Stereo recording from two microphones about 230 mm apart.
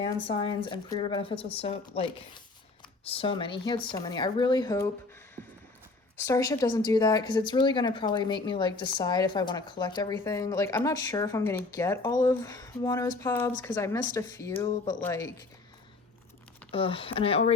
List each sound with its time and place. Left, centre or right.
0.0 s speech: left
6.1 s speech: centre
16.7 s speech: left